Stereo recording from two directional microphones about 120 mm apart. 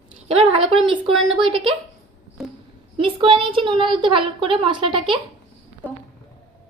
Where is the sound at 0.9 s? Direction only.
45° right (ahead or behind).